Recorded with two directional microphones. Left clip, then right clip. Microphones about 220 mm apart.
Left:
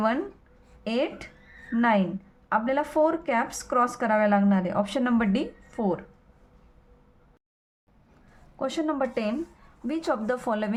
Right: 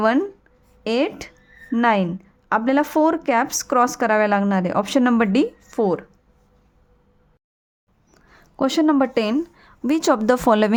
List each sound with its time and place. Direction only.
0.9 s speech: 50° right (ahead or behind)
8.5 s speech: 45° right (ahead or behind)